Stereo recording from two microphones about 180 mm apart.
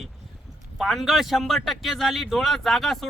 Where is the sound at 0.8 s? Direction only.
Centre (ahead or behind).